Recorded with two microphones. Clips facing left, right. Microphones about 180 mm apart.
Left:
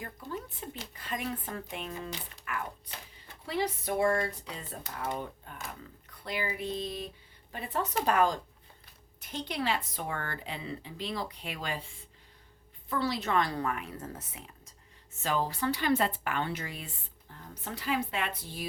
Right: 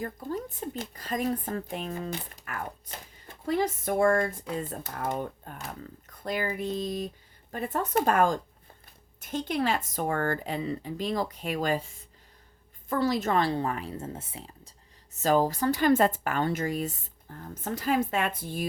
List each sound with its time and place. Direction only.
0.0 s speech: 40° right (ahead or behind)